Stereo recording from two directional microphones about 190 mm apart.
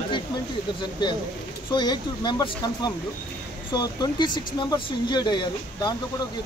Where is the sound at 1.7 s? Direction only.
25° left (ahead or behind).